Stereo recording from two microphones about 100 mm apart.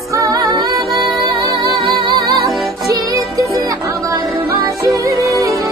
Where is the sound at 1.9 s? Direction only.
55° right (ahead or behind).